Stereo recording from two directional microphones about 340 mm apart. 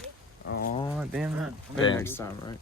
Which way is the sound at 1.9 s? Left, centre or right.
Centre.